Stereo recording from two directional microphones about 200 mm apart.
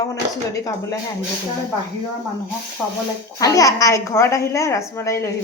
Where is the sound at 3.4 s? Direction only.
15° left (ahead or behind).